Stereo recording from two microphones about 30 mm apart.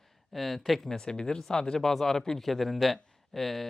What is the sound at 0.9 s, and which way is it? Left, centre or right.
Speech, left.